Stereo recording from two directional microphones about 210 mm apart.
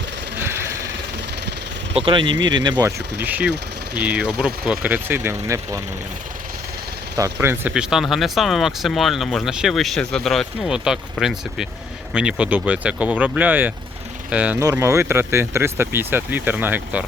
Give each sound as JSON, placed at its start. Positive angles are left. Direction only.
{"t": 0.3, "sound": "sewing machine", "side_deg": -10}
{"t": 1.9, "sound": "speech", "side_deg": -25}
{"t": 3.9, "sound": "speech", "side_deg": -5}
{"t": 7.2, "sound": "speech", "side_deg": -10}